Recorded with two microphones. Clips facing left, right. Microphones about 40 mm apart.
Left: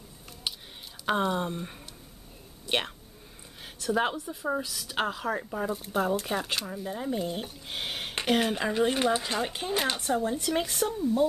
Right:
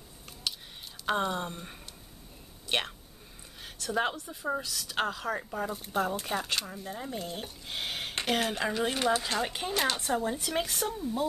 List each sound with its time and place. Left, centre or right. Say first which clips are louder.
0.5 s a sound: left 1 dB; left
1.0 s speech: left 3 dB; centre
2.6 s a sound: left 2 dB; centre
3.6 s speech: left 3 dB; centre
8.9 s speech: left 1 dB; centre
9.4 s speech: left 1 dB; centre